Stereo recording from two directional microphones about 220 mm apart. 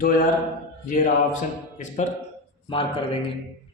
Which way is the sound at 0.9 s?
35° left (ahead or behind).